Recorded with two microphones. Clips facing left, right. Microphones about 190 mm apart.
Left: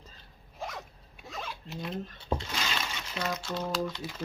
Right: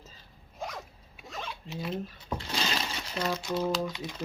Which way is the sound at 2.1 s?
30° left (ahead or behind).